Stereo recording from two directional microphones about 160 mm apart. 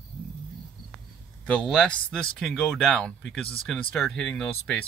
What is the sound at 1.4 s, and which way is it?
Speech, 5° left (ahead or behind).